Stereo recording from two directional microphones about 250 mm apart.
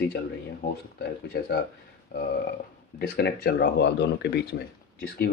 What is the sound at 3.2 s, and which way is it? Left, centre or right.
Speech, left.